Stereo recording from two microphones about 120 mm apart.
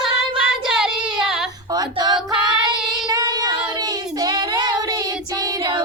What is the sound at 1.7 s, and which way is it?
Female singing, 35° right (ahead or behind).